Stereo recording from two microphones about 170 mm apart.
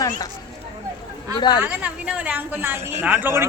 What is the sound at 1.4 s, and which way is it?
Speech, 25° left (ahead or behind).